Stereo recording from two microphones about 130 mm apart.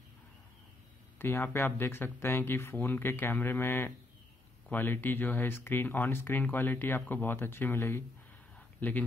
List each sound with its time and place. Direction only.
1.1 s speech: 15° left (ahead or behind)